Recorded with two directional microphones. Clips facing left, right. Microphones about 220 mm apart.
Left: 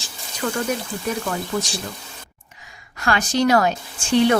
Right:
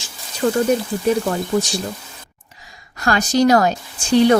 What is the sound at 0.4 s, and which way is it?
Speech, 30° right (ahead or behind).